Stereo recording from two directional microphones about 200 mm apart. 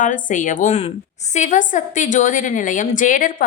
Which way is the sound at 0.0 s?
40° left (ahead or behind).